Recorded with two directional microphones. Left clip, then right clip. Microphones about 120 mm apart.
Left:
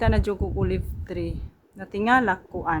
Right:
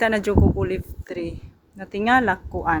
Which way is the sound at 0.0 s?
5° right (ahead or behind).